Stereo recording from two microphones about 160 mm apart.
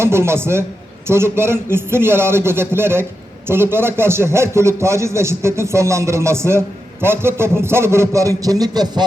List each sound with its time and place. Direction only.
0.0 s a man's voice: 15° right (ahead or behind)